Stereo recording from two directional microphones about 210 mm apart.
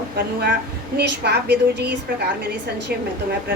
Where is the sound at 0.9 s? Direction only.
50° right (ahead or behind).